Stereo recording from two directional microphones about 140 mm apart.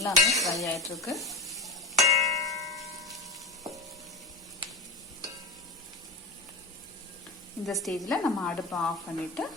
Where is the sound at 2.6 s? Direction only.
Centre (ahead or behind).